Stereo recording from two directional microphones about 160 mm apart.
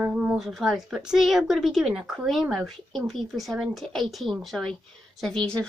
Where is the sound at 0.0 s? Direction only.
10° right (ahead or behind).